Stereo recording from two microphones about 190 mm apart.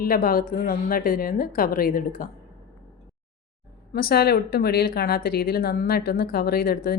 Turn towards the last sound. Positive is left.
turn(degrees=50)  # may be behind; listen again after turning